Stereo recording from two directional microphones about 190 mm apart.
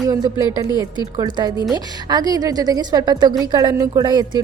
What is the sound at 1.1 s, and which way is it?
A woman's voice, 20° right (ahead or behind).